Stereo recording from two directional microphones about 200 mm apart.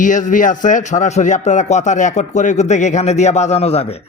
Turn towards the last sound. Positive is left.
turn(degrees=30)  # may be behind; listen again after turning